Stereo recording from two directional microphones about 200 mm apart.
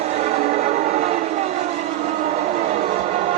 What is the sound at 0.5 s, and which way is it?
Train, 30° right (ahead or behind).